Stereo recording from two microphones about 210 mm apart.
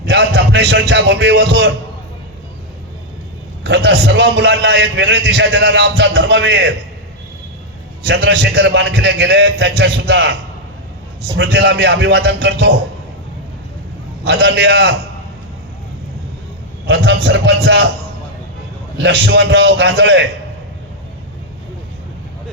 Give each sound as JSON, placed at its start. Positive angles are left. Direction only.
{"t": 0.0, "sound": "a man's voice", "side_deg": -50}
{"t": 3.6, "sound": "a man's voice", "side_deg": -50}
{"t": 8.0, "sound": "a man's voice", "side_deg": -55}
{"t": 11.3, "sound": "a man's voice", "side_deg": -55}
{"t": 14.3, "sound": "a man's voice", "side_deg": -50}
{"t": 16.8, "sound": "a man's voice", "side_deg": -55}
{"t": 18.9, "sound": "a man's voice", "side_deg": -55}